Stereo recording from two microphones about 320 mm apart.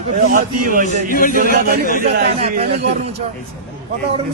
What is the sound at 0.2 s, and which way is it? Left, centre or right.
Speech, right.